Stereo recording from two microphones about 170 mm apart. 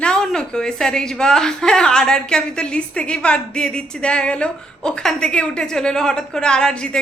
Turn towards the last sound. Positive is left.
turn(degrees=5)  # may be behind; listen again after turning